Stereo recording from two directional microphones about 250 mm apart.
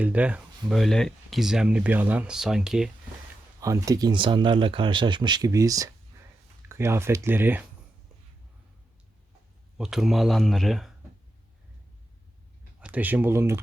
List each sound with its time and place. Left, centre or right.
0.0 s speech: centre
3.6 s speech: centre
9.7 s speech: centre
12.8 s speech: centre